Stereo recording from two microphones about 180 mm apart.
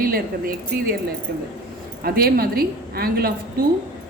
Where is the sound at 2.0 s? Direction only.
60° right (ahead or behind).